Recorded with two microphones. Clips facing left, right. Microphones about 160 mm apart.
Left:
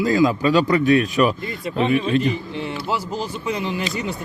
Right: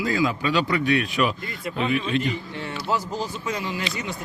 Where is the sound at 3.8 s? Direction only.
40° left (ahead or behind).